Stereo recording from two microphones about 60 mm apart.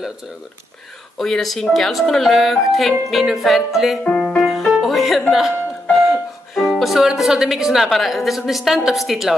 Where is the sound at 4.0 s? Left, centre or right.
Centre.